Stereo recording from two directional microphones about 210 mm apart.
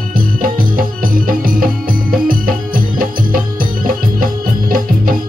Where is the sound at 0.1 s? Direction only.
40° right (ahead or behind).